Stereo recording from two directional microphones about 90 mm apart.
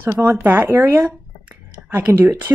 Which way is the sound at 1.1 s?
20° right (ahead or behind).